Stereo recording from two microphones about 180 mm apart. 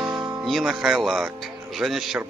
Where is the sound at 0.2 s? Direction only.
5° right (ahead or behind).